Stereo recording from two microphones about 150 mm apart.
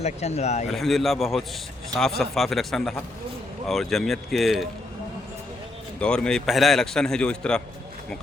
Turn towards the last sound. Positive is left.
turn(degrees=5)  # may be behind; listen again after turning